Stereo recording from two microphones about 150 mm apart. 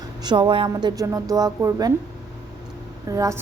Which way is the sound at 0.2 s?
30° right (ahead or behind).